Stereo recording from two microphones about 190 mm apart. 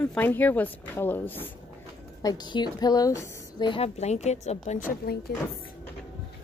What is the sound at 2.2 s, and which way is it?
Speech, 20° left (ahead or behind).